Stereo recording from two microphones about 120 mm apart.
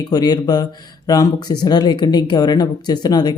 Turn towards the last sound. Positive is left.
turn(degrees=35)  # may be behind; listen again after turning